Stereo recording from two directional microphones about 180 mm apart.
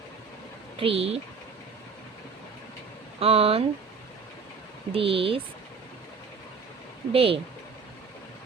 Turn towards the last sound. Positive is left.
turn(degrees=-30)  # may be behind; listen again after turning